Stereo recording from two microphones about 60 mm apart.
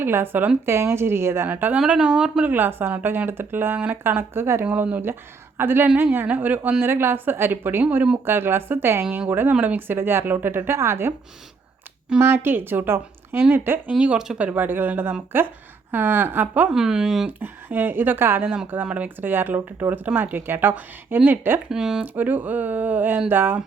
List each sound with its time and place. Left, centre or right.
0.0 s a woman's voice: right
1.5 s speech: right
1.9 s speech: centre
2.4 s a woman's voice: right
9.3 s a woman's voice: right
10.6 s speech: right
12.2 s a woman's voice: right
16.7 s speech: centre
17.2 s a woman's voice: right
18.4 s speech: centre
18.9 s a woman's voice: right
21.7 s speech: centre
22.0 s a woman's voice: right